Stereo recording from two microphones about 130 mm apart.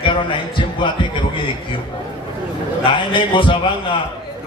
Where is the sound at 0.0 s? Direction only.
40° left (ahead or behind).